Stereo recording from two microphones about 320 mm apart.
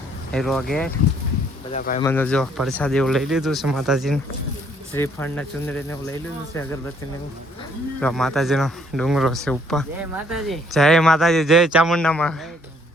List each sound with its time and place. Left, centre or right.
0.3 s speech: centre
1.7 s speech: left
2.0 s speech: centre
8.0 s speech: centre